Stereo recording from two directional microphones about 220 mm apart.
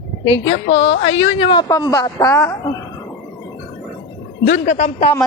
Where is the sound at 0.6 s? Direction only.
55° left (ahead or behind).